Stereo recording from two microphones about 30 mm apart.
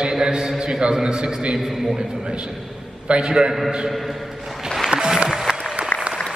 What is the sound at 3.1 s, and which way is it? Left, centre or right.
Speech, right.